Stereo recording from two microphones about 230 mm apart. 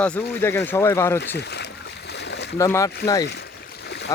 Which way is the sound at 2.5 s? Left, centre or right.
Centre.